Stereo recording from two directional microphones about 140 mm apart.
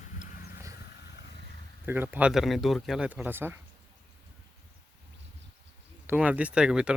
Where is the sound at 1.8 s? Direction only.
15° right (ahead or behind).